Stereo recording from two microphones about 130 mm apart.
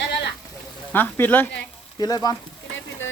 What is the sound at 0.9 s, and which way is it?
Speech, 15° left (ahead or behind).